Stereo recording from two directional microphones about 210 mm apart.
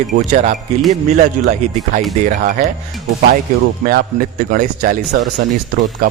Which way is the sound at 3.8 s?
40° right (ahead or behind).